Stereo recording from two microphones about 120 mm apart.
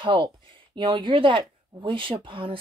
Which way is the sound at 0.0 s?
45° right (ahead or behind).